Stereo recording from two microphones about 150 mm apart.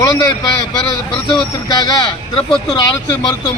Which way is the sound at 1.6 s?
25° left (ahead or behind).